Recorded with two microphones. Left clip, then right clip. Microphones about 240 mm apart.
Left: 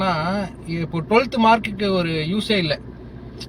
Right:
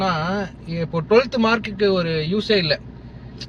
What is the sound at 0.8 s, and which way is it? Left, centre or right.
A man's voice, centre.